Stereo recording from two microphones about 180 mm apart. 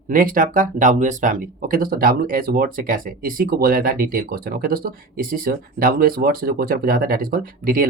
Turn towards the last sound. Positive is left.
turn(degrees=-50)  # may be behind; listen again after turning